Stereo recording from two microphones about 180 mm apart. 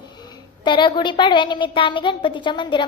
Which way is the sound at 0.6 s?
25° left (ahead or behind).